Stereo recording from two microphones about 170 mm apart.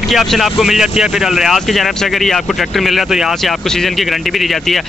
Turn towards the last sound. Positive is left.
turn(degrees=0)  # may be behind; listen again after turning